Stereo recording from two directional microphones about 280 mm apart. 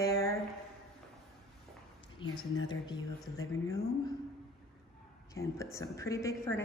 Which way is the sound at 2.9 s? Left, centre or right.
Centre.